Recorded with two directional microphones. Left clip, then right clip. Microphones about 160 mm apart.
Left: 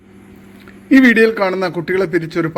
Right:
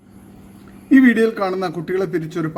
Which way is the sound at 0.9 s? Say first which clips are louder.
Left 4 dB; 15° left (ahead or behind).